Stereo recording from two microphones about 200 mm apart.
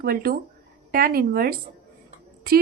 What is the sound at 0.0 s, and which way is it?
A woman's voice, 50° right (ahead or behind).